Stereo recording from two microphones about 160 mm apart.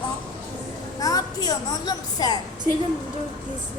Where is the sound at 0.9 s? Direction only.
25° left (ahead or behind).